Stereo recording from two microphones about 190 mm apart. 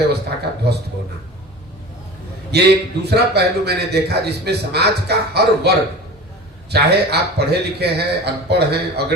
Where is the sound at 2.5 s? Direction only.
60° right (ahead or behind).